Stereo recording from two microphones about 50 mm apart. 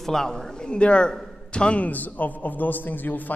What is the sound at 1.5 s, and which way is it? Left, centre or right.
Speech, centre.